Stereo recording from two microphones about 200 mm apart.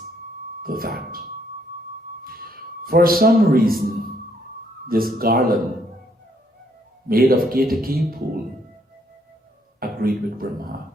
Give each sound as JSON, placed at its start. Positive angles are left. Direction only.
{"t": 0.6, "sound": "a man's voice", "side_deg": -45}
{"t": 2.8, "sound": "a man's voice", "side_deg": -50}
{"t": 7.1, "sound": "a man's voice", "side_deg": -45}
{"t": 9.8, "sound": "a man's voice", "side_deg": -45}